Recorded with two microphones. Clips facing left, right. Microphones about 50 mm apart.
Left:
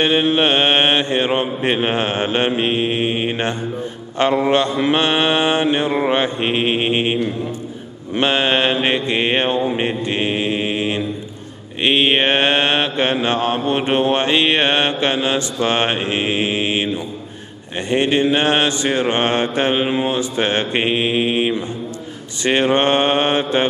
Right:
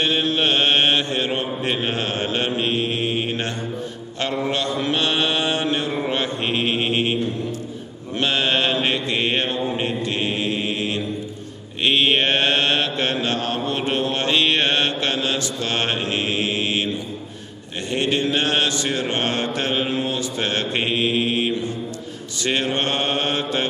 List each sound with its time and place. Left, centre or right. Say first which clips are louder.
0.0 s mantra: left 5 dB; left
4.2 s mantra: left 8 dB; left
5.9 s mantra: left 6 dB; left
6.1 s mantra: left 5 dB; left
8.2 s mantra: left 4 dB; left